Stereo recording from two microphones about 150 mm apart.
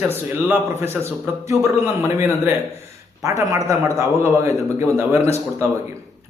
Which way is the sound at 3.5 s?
20° right (ahead or behind).